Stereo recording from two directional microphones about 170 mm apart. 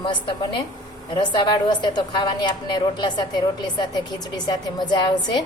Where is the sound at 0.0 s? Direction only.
30° left (ahead or behind).